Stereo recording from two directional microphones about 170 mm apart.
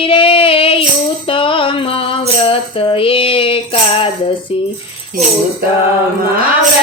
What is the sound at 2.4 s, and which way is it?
Tambourine, 30° left (ahead or behind).